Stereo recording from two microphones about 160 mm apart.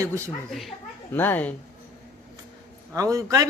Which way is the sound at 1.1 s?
10° left (ahead or behind).